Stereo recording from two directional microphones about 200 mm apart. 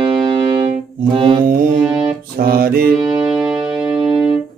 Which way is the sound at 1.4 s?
45° right (ahead or behind).